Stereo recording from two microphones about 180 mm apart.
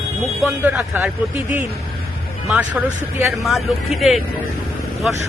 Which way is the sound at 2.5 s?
5° right (ahead or behind).